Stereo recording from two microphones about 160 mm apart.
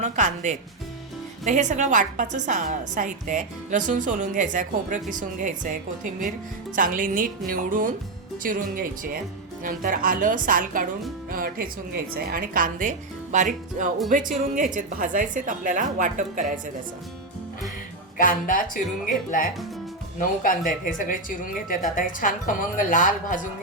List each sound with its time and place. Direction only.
0.0 s a woman's voice: 50° right (ahead or behind)
18.2 s speech: 60° left (ahead or behind)